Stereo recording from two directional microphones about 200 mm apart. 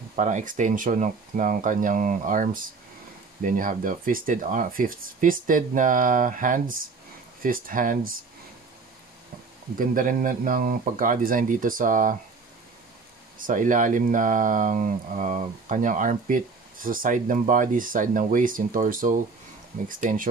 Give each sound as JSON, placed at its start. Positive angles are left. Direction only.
{"t": 0.1, "sound": "speech", "side_deg": -35}
{"t": 9.8, "sound": "speech", "side_deg": -40}
{"t": 13.4, "sound": "speech", "side_deg": -40}